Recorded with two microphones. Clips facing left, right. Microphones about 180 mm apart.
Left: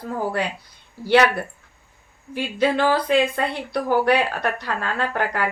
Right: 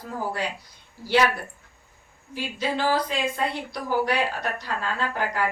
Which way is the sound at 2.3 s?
60° left (ahead or behind).